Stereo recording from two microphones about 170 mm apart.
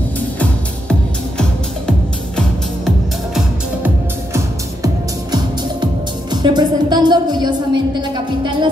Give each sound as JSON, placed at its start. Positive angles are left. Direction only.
{"t": 1.4, "sound": "music", "side_deg": 5}
{"t": 3.3, "sound": "music", "side_deg": -10}
{"t": 4.8, "sound": "music", "side_deg": -25}